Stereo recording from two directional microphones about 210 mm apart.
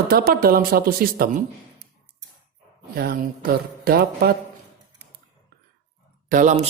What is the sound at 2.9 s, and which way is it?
A man's voice, 40° right (ahead or behind).